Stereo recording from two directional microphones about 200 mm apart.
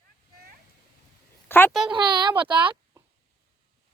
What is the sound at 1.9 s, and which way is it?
Speech, 20° right (ahead or behind).